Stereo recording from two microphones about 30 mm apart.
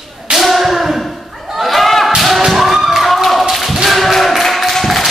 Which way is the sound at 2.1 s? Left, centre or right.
Centre.